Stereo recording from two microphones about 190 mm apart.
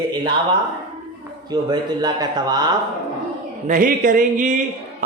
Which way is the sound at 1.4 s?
20° right (ahead or behind).